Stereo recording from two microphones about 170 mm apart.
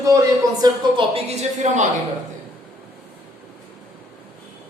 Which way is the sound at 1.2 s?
40° right (ahead or behind).